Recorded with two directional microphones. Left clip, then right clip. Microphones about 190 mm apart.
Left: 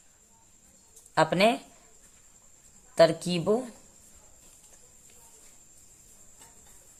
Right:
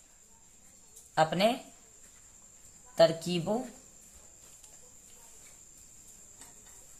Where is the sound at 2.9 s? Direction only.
50° left (ahead or behind).